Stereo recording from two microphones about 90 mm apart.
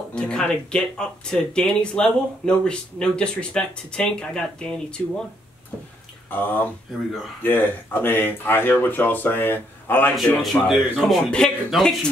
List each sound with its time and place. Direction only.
0.1 s speech: 10° left (ahead or behind)
6.3 s speech: 20° left (ahead or behind)
10.1 s speech: centre (ahead or behind)